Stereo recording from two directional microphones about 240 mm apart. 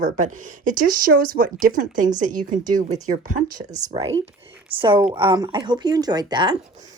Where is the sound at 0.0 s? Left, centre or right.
Right.